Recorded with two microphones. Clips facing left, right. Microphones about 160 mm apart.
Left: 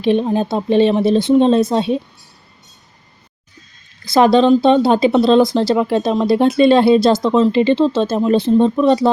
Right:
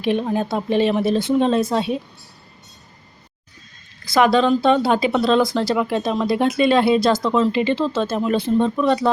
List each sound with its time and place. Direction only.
0.0 s speech: 30° left (ahead or behind)
4.1 s speech: 30° left (ahead or behind)